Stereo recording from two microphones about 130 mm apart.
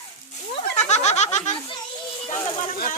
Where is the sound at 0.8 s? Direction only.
60° left (ahead or behind).